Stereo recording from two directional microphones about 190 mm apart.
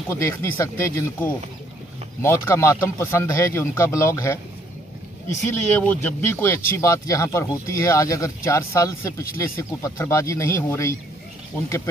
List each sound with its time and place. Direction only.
0.1 s speech: 15° left (ahead or behind)
5.5 s speech: 10° left (ahead or behind)